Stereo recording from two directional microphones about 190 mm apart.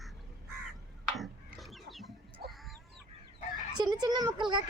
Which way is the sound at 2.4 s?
55° right (ahead or behind).